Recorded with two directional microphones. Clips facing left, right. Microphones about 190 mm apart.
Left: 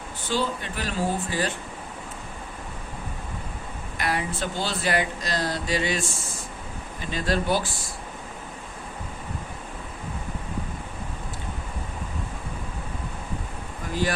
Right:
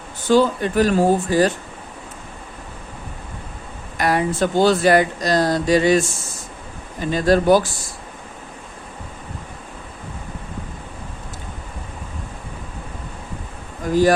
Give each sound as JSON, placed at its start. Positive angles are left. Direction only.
{"t": 0.3, "sound": "speech", "side_deg": -45}
{"t": 3.9, "sound": "speech", "side_deg": -45}